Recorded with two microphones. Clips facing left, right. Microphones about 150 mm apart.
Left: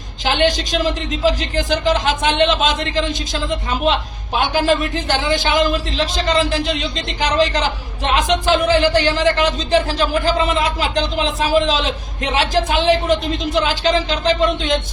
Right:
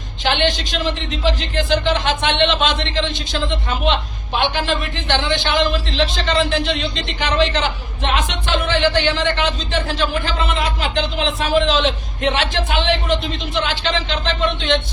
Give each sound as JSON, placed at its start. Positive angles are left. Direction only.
{"t": 0.3, "sound": "a man's voice", "side_deg": 40}